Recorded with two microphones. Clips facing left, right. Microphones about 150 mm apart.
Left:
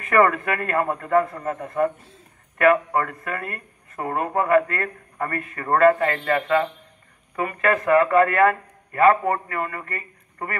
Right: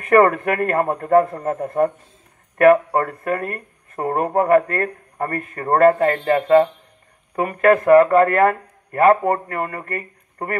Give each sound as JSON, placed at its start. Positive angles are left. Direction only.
{"t": 0.0, "sound": "a man's voice", "side_deg": -45}